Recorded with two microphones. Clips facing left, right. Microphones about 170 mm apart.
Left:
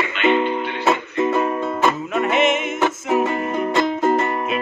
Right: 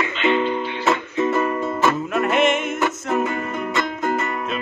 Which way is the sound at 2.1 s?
Centre (ahead or behind).